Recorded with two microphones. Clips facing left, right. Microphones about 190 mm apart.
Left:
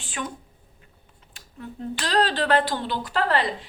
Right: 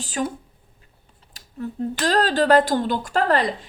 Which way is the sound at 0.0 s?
40° right (ahead or behind).